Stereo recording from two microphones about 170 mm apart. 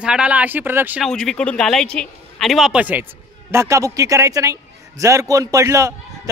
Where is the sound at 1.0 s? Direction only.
5° left (ahead or behind).